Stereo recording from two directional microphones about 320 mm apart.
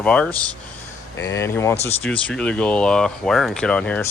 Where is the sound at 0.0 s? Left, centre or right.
Centre.